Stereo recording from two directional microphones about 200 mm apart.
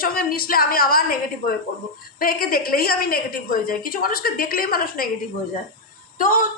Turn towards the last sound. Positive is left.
turn(degrees=40)  # may be behind; listen again after turning